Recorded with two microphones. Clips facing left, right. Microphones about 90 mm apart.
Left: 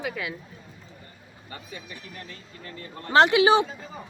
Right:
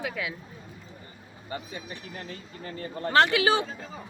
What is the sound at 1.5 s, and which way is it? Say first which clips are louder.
Speech: right 4 dB; 30° right (ahead or behind).